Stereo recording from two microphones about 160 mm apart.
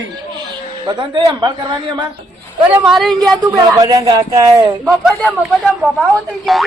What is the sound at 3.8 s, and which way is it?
Speech, 20° right (ahead or behind).